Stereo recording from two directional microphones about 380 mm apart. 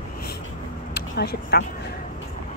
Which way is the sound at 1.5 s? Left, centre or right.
Left.